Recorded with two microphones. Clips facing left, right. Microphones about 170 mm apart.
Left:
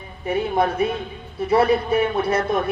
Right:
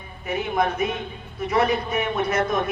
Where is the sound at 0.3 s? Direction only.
30° left (ahead or behind).